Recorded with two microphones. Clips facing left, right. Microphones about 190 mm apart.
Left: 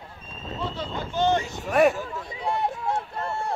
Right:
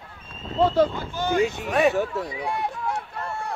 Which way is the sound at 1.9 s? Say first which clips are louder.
Right 8 dB; 75° right (ahead or behind).